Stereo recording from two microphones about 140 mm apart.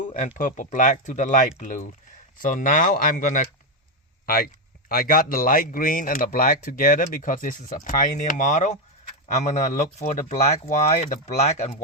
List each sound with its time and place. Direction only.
0.0 s a sound: 65° left (ahead or behind)
0.3 s speech: 70° left (ahead or behind)
4.3 s speech: 90° left; by 11.8 s 55° left (ahead or behind)